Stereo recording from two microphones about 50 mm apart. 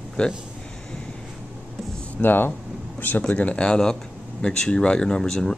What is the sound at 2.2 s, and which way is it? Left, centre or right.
Speech, left.